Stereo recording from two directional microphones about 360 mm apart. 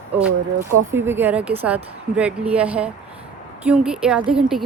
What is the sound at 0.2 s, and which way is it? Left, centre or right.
Speech, centre.